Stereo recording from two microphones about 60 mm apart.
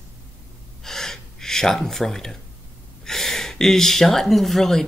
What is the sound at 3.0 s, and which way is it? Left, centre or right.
Speech, centre.